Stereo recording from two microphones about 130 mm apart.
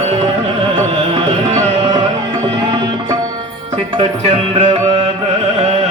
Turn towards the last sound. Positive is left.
turn(degrees=-50)  # may be behind; listen again after turning